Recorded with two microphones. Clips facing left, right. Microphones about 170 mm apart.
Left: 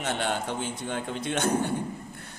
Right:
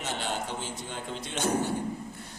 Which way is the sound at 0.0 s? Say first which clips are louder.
Left 4 dB; 55° left (ahead or behind).